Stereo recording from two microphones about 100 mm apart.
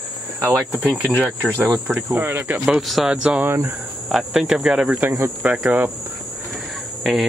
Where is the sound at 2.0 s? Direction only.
20° right (ahead or behind).